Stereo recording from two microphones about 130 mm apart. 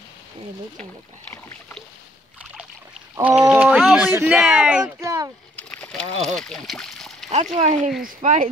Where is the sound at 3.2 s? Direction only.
10° right (ahead or behind).